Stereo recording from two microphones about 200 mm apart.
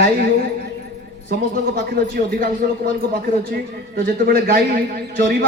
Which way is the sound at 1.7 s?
45° right (ahead or behind).